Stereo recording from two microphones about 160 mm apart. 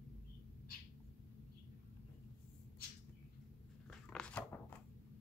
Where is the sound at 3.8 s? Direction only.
5° left (ahead or behind).